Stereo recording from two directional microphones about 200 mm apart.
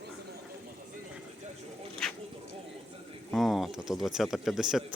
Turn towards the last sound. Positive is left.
turn(degrees=0)  # may be behind; listen again after turning